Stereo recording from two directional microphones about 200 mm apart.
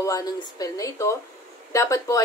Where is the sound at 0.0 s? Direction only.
20° left (ahead or behind).